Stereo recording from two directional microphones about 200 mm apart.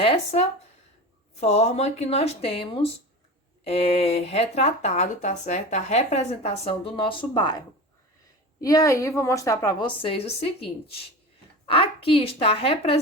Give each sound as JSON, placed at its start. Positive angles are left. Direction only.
{"t": 0.0, "sound": "speech", "side_deg": 30}
{"t": 8.6, "sound": "a woman's voice", "side_deg": 15}